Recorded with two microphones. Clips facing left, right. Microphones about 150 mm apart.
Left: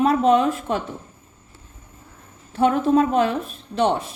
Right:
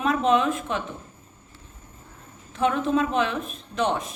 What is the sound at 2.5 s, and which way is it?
A woman's voice, 35° left (ahead or behind).